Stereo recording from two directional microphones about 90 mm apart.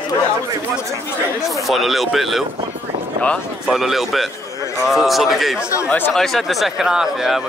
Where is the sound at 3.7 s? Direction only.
Centre (ahead or behind).